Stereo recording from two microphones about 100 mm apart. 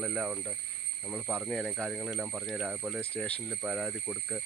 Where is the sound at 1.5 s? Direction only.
Centre (ahead or behind).